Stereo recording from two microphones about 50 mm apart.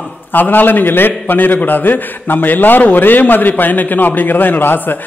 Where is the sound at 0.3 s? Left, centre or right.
Left.